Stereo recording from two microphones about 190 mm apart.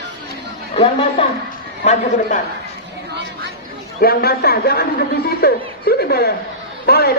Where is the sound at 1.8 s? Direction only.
40° left (ahead or behind).